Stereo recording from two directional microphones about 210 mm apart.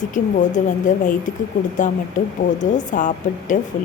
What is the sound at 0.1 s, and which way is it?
A woman's voice, 35° left (ahead or behind).